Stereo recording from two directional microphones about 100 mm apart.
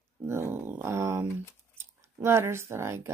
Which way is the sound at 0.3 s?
25° right (ahead or behind).